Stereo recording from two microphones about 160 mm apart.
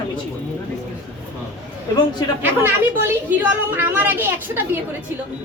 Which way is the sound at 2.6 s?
10° right (ahead or behind).